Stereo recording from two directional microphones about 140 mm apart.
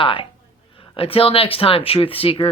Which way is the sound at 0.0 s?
40° left (ahead or behind).